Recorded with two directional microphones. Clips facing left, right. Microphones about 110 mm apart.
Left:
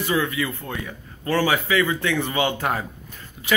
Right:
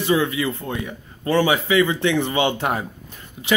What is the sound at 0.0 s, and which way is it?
A man's voice, 25° right (ahead or behind).